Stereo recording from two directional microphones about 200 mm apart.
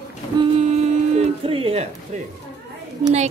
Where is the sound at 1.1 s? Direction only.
30° right (ahead or behind).